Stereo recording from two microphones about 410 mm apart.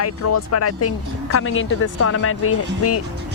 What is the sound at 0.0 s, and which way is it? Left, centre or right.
Speech, left.